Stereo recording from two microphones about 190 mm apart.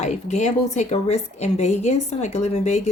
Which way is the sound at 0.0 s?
35° left (ahead or behind).